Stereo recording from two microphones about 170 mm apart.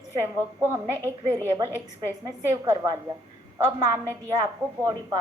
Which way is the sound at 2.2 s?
20° right (ahead or behind).